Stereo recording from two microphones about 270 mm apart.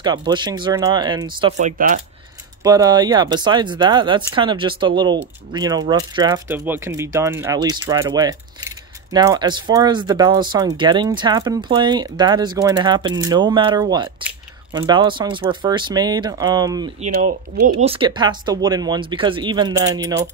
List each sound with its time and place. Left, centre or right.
0.0 s speech: centre
17.0 s speech: right